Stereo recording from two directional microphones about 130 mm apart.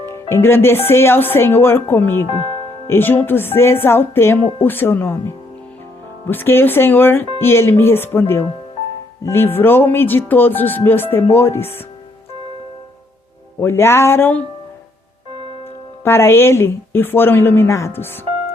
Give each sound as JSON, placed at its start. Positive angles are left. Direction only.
{"t": 0.0, "sound": "music", "side_deg": 20}
{"t": 2.3, "sound": "speech", "side_deg": -45}
{"t": 2.8, "sound": "music", "side_deg": 15}
{"t": 7.3, "sound": "speech", "side_deg": 20}
{"t": 9.2, "sound": "music", "side_deg": 15}
{"t": 13.6, "sound": "speech", "side_deg": 20}
{"t": 16.0, "sound": "music", "side_deg": 20}